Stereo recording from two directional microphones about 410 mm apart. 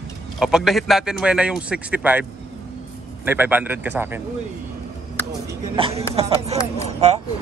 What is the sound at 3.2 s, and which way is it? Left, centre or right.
Speech, centre.